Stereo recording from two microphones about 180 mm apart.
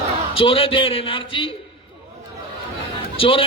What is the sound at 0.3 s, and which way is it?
A man's voice, 30° left (ahead or behind).